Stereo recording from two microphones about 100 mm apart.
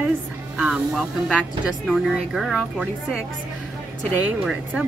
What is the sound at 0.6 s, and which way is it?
Speech, centre (ahead or behind).